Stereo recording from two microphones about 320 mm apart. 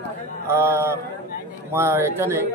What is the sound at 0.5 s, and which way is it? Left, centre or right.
A man's voice, centre.